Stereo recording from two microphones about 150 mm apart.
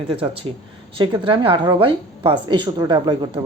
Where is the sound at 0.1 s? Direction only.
40° right (ahead or behind).